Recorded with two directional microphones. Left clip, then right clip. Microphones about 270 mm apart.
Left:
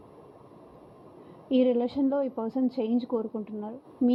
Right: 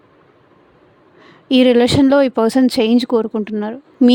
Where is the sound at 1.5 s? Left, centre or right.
Right.